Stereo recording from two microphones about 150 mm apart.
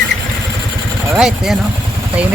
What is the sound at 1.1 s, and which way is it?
Speech, 5° right (ahead or behind).